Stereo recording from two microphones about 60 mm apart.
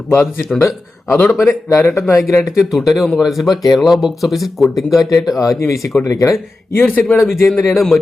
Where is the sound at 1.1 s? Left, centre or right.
Left.